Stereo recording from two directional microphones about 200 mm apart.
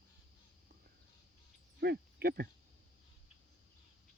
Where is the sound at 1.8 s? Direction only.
55° right (ahead or behind).